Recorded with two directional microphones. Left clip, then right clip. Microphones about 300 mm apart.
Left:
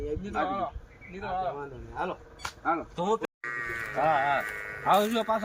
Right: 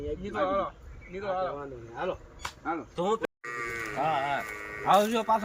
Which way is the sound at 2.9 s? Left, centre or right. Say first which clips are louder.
Even; centre.